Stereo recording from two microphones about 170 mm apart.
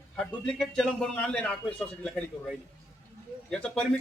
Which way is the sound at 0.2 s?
5° left (ahead or behind).